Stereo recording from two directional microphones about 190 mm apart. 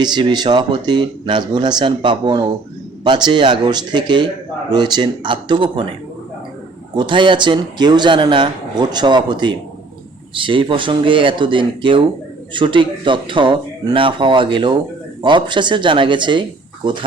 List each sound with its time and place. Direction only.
0.0 s speech: 25° right (ahead or behind)
6.9 s speech: 25° right (ahead or behind)